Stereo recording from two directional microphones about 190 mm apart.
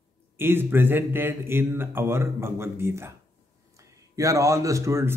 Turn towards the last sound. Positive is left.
turn(degrees=-15)  # may be behind; listen again after turning